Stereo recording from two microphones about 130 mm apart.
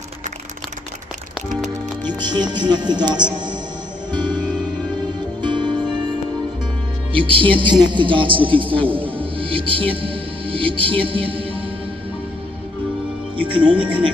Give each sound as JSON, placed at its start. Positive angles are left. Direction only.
{"t": 2.0, "sound": "speech", "side_deg": -35}
{"t": 4.1, "sound": "music", "side_deg": -35}
{"t": 5.4, "sound": "music", "side_deg": -35}
{"t": 7.1, "sound": "speech", "side_deg": -40}
{"t": 10.0, "sound": "music", "side_deg": -40}
{"t": 11.1, "sound": "a man's voice", "side_deg": -40}
{"t": 13.6, "sound": "speech", "side_deg": -10}